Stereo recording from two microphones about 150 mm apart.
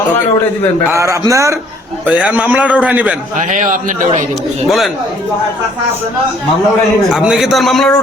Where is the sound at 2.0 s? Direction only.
10° right (ahead or behind).